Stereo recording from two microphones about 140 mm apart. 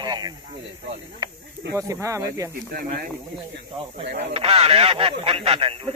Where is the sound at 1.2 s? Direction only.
25° right (ahead or behind).